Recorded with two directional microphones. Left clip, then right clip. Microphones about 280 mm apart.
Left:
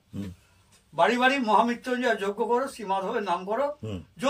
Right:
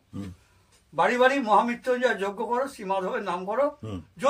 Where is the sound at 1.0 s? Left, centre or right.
Centre.